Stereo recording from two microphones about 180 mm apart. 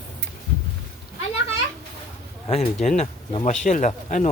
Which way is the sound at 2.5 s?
40° left (ahead or behind).